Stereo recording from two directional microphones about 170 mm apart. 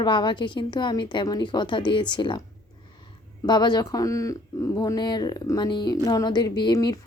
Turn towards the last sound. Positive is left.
turn(degrees=25)  # may be behind; listen again after turning